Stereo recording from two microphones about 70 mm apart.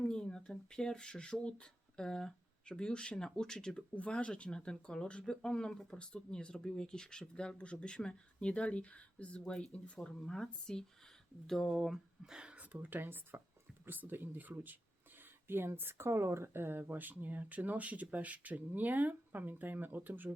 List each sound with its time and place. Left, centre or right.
0.0 s speech: centre; by 20.3 s right